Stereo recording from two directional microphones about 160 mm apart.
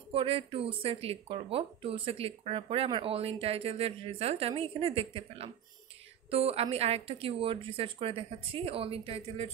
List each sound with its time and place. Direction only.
0.1 s speech: 35° right (ahead or behind)